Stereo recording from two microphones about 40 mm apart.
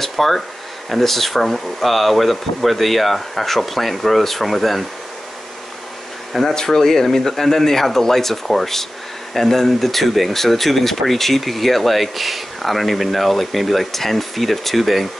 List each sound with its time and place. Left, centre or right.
0.0 s a sound: centre
0.8 s speech: centre
6.5 s speech: centre